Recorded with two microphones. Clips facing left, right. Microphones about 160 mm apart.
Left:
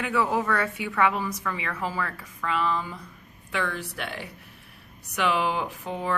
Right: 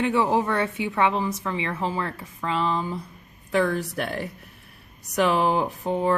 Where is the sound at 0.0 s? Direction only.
25° right (ahead or behind).